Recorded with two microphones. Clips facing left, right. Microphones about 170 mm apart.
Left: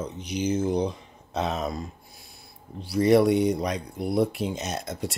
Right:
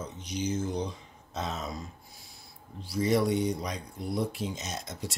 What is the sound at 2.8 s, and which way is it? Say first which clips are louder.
Speech: left 7 dB; 65° left (ahead or behind).